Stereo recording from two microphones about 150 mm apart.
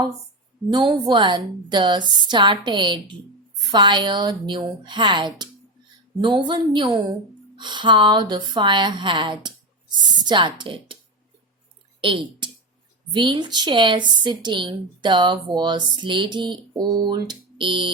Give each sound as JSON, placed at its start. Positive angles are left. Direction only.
{"t": 0.7, "sound": "a woman's voice", "side_deg": -25}
{"t": 11.9, "sound": "a woman's voice", "side_deg": -35}